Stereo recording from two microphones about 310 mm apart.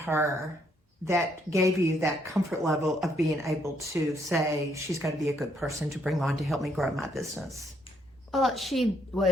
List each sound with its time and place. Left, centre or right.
0.0 s speech: centre